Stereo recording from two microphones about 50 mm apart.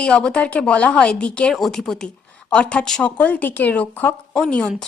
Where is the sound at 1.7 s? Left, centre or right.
Centre.